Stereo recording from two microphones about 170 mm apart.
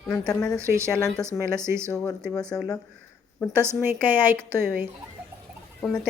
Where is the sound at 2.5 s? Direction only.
5° left (ahead or behind).